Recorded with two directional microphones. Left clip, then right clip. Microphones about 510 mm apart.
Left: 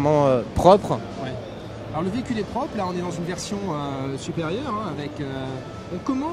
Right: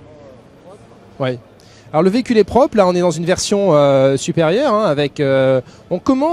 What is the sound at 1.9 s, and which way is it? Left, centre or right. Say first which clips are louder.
Speech: right 14 dB; centre.